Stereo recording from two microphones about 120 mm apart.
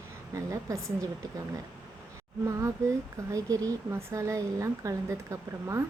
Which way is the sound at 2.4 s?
25° right (ahead or behind).